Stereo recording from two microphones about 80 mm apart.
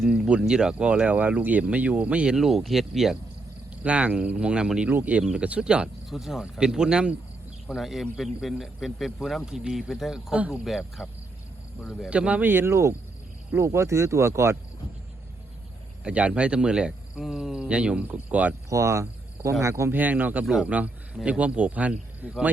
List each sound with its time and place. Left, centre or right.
0.0 s speech: centre
2.3 s speech: centre
3.8 s speech: centre
6.1 s speech: centre
12.1 s speech: centre; by 14.5 s right
16.0 s speech: centre
18.7 s speech: right
19.9 s speech: right
20.4 s speech: centre
20.7 s a man's voice: centre